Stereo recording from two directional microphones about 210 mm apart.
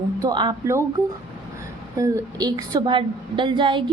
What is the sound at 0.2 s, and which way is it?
Speech, 20° right (ahead or behind).